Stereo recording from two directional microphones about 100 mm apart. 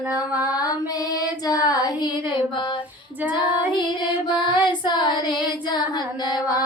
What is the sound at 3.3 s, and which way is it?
Female singing, 50° left (ahead or behind).